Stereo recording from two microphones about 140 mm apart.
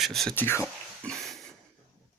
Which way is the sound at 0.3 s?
15° left (ahead or behind).